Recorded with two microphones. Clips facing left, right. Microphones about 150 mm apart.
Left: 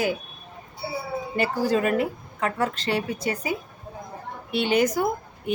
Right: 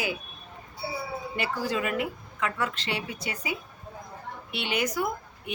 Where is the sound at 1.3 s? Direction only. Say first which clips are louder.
Left 7 dB; 40° left (ahead or behind).